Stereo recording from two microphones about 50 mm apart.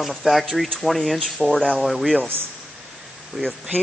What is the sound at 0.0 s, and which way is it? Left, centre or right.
Speech, centre.